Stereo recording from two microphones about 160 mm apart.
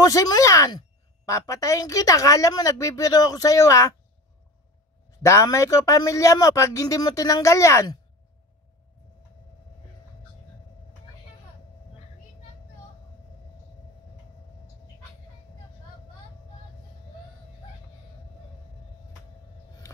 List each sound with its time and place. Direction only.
0.0 s a woman's voice: 25° left (ahead or behind)
5.2 s a woman's voice: 20° left (ahead or behind)